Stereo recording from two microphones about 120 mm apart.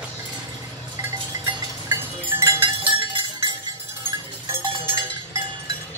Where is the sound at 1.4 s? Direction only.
20° right (ahead or behind).